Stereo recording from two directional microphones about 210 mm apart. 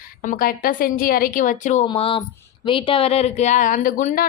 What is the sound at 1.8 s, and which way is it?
Speech, 25° left (ahead or behind).